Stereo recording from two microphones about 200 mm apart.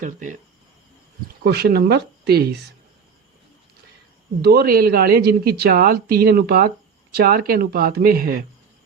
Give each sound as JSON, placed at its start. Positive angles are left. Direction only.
{"t": 0.0, "sound": "speech", "side_deg": -40}
{"t": 1.5, "sound": "speech", "side_deg": -55}
{"t": 4.4, "sound": "speech", "side_deg": -50}